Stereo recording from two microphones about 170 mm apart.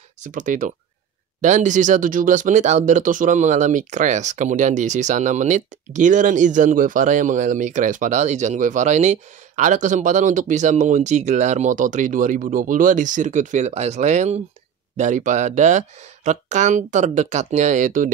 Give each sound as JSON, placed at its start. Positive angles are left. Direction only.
{"t": 0.3, "sound": "speech", "side_deg": -50}